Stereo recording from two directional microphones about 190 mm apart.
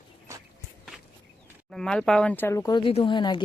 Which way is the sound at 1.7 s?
5° left (ahead or behind).